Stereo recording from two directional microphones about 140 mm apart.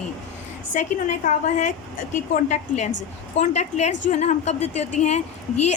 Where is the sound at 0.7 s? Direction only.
60° left (ahead or behind).